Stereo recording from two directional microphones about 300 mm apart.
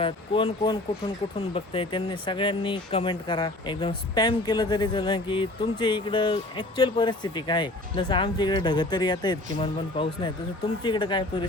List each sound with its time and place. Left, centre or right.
0.0 s speech: centre